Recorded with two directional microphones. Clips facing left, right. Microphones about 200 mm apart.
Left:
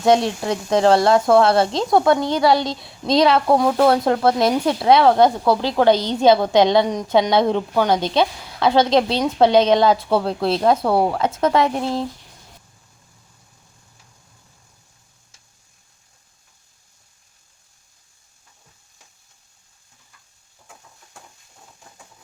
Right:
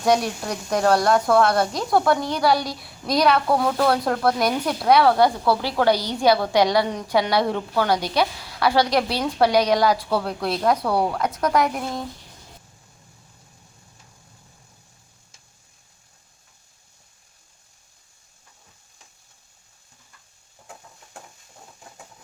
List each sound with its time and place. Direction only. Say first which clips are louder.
0.0 s a woman's voice: left 4 dB; 25° left (ahead or behind)